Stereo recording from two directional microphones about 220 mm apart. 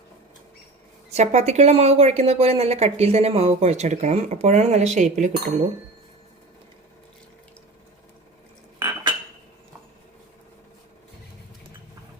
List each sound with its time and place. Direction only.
1.1 s speech: 30° right (ahead or behind)